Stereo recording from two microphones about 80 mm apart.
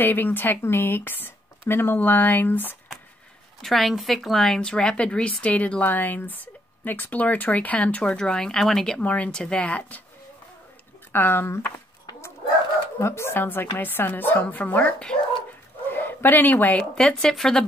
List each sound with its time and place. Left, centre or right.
0.0 s speech: left
3.6 s speech: centre
9.0 s speech: centre
11.1 s speech: left
13.0 s speech: left; by 15.1 s centre
15.9 s speech: left
16.9 s speech: centre